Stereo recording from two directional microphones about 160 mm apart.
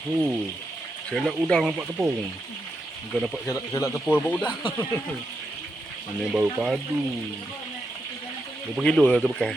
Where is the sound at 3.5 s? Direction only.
20° left (ahead or behind).